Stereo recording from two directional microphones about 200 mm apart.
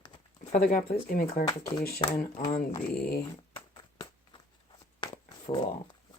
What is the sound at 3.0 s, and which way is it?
Speech, 50° left (ahead or behind).